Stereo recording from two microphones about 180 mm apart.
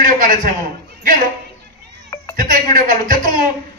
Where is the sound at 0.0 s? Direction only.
50° right (ahead or behind).